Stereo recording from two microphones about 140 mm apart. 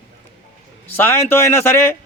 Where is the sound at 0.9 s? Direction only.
15° left (ahead or behind).